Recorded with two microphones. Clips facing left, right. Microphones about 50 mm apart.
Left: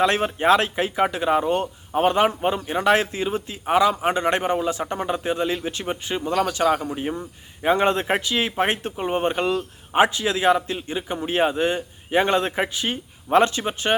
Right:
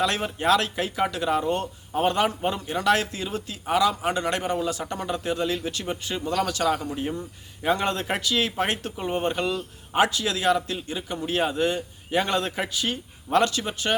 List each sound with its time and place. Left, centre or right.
0.0 s a man's voice: left